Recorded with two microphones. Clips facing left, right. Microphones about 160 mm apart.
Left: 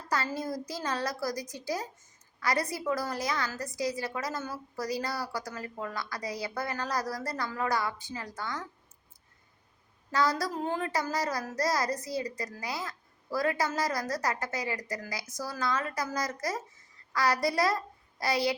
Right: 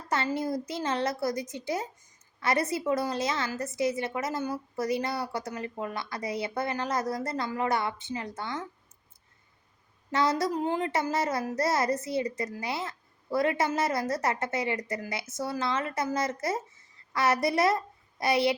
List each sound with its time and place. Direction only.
0.1 s a woman's voice: 25° right (ahead or behind)
10.1 s a woman's voice: 25° right (ahead or behind)